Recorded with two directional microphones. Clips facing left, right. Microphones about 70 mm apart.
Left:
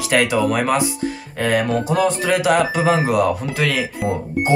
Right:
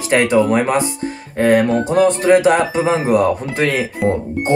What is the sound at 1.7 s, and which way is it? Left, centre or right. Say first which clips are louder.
Music: right 4 dB; right.